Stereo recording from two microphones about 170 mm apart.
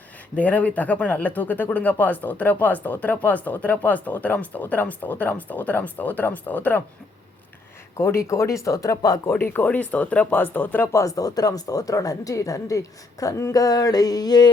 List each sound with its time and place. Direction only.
0.3 s speech: 10° left (ahead or behind)
7.9 s speech: 15° left (ahead or behind)